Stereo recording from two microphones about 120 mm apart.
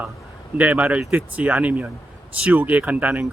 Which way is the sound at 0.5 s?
10° right (ahead or behind).